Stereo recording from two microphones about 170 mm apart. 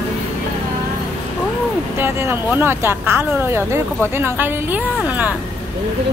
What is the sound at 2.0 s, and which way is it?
Speech, 10° right (ahead or behind).